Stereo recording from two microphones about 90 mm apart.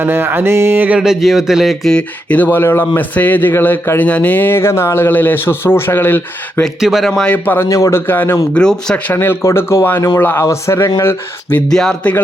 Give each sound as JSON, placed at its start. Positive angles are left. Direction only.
{"t": 0.0, "sound": "music", "side_deg": -25}
{"t": 0.9, "sound": "speech", "side_deg": -5}
{"t": 1.9, "sound": "speech", "side_deg": 15}
{"t": 6.7, "sound": "speech", "side_deg": -5}
{"t": 7.3, "sound": "speech", "side_deg": 20}
{"t": 7.7, "sound": "speech", "side_deg": 35}
{"t": 8.5, "sound": "speech", "side_deg": 5}
{"t": 9.1, "sound": "speech", "side_deg": 25}
{"t": 11.7, "sound": "speech", "side_deg": 5}